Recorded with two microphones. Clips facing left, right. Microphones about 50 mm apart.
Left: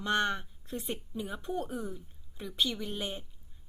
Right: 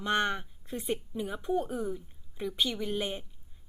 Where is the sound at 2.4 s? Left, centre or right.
Right.